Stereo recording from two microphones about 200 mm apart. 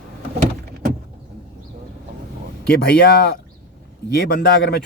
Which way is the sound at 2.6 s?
50° left (ahead or behind).